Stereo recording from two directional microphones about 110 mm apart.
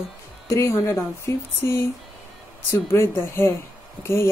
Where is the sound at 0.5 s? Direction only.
25° left (ahead or behind).